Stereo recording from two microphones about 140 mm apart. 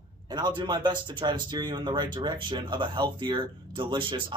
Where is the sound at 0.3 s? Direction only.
30° right (ahead or behind).